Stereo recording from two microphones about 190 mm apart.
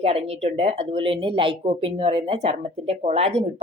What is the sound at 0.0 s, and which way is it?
Speech, 30° right (ahead or behind).